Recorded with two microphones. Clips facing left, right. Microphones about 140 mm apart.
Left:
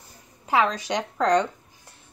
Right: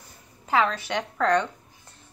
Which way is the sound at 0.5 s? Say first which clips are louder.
Left 1 dB; 15° left (ahead or behind).